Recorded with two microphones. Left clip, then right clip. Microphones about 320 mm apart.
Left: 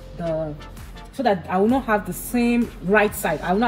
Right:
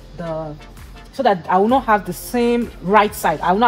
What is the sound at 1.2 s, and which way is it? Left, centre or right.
A woman's voice, centre.